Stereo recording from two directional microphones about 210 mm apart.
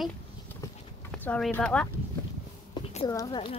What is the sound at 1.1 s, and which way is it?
Speech, 5° left (ahead or behind).